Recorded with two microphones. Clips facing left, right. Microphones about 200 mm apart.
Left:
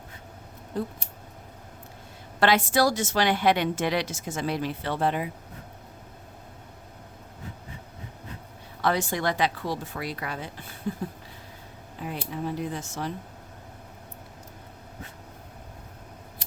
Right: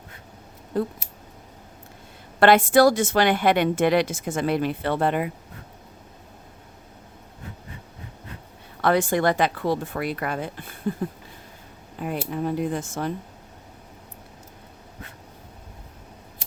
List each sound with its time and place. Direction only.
2.4 s a woman's voice: 55° right (ahead or behind)
8.8 s speech: 55° right (ahead or behind)
11.9 s speech: 55° right (ahead or behind)